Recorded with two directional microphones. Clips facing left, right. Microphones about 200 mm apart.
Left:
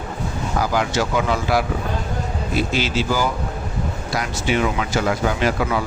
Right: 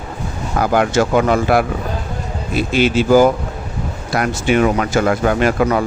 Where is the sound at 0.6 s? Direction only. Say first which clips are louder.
Right 7 dB; 55° right (ahead or behind).